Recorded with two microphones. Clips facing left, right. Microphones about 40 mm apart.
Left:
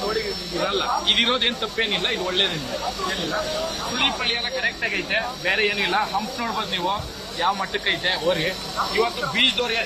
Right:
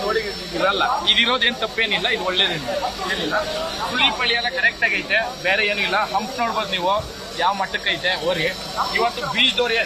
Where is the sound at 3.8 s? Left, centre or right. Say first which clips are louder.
Right 5 dB; right.